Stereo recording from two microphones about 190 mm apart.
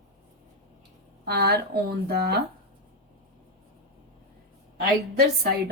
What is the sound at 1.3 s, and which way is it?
Speech, 60° right (ahead or behind).